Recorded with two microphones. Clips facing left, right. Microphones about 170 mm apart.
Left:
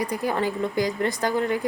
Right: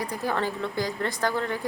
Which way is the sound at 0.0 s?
15° left (ahead or behind).